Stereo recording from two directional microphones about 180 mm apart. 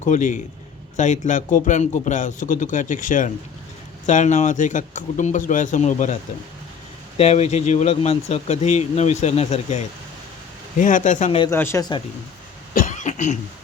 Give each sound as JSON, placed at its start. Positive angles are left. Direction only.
{"t": 0.0, "sound": "a man's voice", "side_deg": 45}
{"t": 7.2, "sound": "a man's voice", "side_deg": 35}
{"t": 11.5, "sound": "speech", "side_deg": 15}
{"t": 12.7, "sound": "cough", "side_deg": 45}